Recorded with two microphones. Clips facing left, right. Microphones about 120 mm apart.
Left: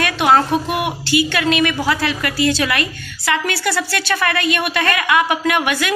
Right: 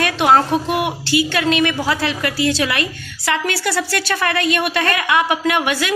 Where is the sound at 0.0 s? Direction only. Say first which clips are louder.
Even; 30° right (ahead or behind).